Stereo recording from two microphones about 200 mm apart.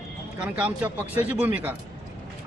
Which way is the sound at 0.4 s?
5° right (ahead or behind).